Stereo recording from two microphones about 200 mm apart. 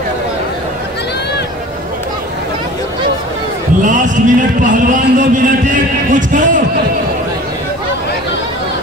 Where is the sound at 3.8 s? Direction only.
40° right (ahead or behind).